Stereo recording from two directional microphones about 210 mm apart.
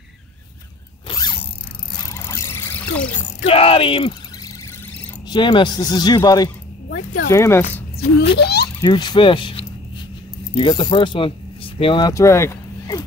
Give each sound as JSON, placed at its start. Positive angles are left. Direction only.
{"t": 1.0, "sound": "mechanisms", "side_deg": 20}
{"t": 2.1, "sound": "vehicle", "side_deg": 10}
{"t": 3.4, "sound": "speech", "side_deg": 25}
{"t": 5.3, "sound": "speech", "side_deg": 20}
{"t": 8.4, "sound": "a sound", "side_deg": 50}
{"t": 8.8, "sound": "speech", "side_deg": 20}